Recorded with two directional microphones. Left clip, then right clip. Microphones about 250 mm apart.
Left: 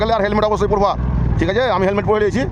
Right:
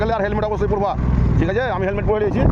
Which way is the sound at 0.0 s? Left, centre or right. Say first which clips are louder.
Left 4 dB; centre.